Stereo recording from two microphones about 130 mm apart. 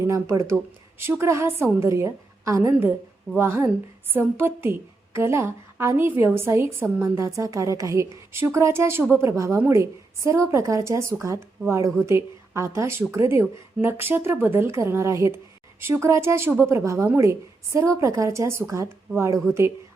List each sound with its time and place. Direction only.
0.0 s a woman's voice: 20° right (ahead or behind)